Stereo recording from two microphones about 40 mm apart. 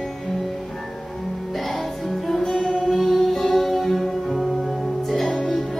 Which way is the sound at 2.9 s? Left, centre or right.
Centre.